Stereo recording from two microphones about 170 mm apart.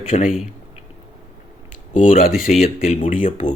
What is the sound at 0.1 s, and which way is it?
Speech, 40° left (ahead or behind).